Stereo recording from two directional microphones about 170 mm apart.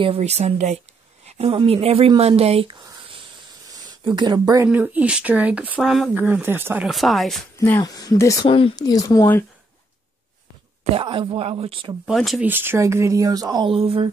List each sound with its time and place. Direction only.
0.0 s speech: 35° right (ahead or behind)
4.6 s speech: 10° right (ahead or behind)
6.9 s speech: centre (ahead or behind)
7.5 s speech: 10° left (ahead or behind)
7.8 s speech: 20° left (ahead or behind)
8.5 s speech: 30° left (ahead or behind)
10.8 s speech: 30° right (ahead or behind)
12.1 s speech: centre (ahead or behind)
12.4 s speech: 10° right (ahead or behind)
13.7 s speech: 35° right (ahead or behind)